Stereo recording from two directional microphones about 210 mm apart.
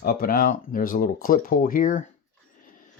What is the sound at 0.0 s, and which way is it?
Speech, 45° left (ahead or behind).